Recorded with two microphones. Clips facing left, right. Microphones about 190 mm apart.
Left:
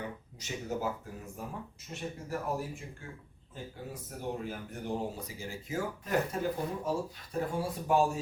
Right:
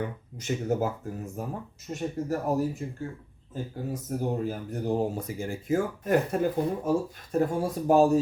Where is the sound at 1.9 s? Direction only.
45° right (ahead or behind).